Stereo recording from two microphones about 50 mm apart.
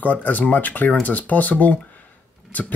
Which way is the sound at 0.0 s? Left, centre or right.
Left.